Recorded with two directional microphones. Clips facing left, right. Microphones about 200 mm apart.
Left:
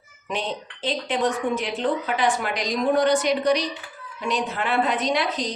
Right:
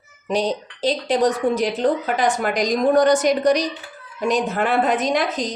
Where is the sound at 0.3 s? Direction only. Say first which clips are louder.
Right 7 dB; 40° right (ahead or behind).